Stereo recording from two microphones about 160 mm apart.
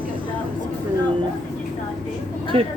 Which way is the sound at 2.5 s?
35° right (ahead or behind).